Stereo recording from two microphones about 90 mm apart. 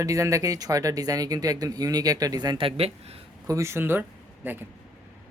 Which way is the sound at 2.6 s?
90° right.